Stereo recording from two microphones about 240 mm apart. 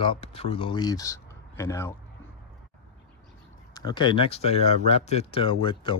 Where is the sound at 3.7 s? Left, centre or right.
Centre.